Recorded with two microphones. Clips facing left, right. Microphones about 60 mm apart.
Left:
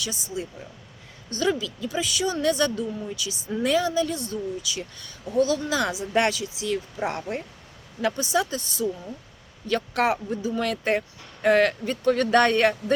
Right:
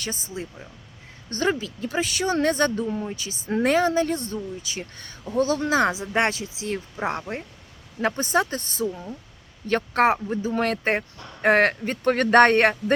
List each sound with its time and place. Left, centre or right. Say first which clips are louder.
0.0 s speech: left 1 dB; right
8.0 s speech: right 2 dB; right